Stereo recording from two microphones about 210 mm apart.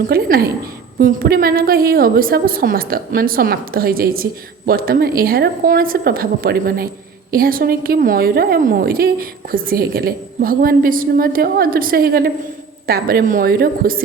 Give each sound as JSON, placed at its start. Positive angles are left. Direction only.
{"t": 0.1, "sound": "a woman's voice", "side_deg": -45}